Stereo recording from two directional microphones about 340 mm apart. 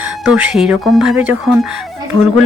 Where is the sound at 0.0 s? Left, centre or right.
Centre.